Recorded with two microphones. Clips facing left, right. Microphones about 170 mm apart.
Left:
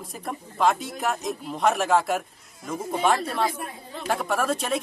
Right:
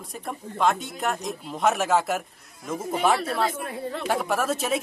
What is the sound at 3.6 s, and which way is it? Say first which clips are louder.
Speech: right 7 dB; 65° right (ahead or behind).